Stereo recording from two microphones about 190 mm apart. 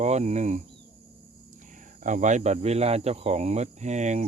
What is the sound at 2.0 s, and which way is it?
Speech, 40° right (ahead or behind).